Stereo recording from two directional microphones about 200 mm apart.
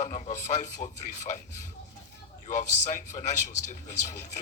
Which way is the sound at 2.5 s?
35° left (ahead or behind).